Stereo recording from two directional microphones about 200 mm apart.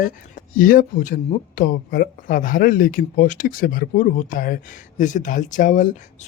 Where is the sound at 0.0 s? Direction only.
45° left (ahead or behind).